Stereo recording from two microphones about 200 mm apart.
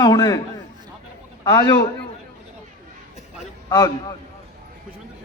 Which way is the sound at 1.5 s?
20° left (ahead or behind).